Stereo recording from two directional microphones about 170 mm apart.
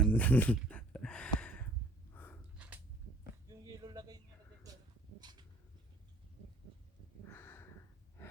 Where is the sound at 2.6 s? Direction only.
5° right (ahead or behind).